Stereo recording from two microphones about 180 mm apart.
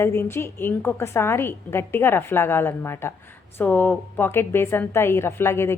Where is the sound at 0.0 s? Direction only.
15° left (ahead or behind).